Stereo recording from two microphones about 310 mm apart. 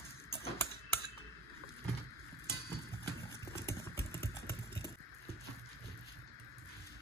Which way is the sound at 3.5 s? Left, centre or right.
Centre.